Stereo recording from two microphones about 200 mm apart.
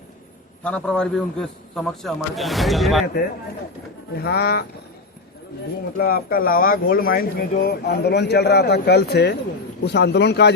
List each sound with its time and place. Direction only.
0.6 s a man's voice: 5° left (ahead or behind)
4.2 s speech: 50° left (ahead or behind)
6.0 s a man's voice: 50° left (ahead or behind)